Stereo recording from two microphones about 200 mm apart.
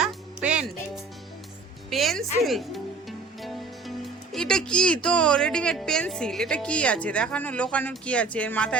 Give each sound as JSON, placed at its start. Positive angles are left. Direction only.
{"t": 0.0, "sound": "music", "side_deg": -5}
{"t": 1.9, "sound": "music", "side_deg": 0}
{"t": 5.0, "sound": "a woman's voice", "side_deg": 5}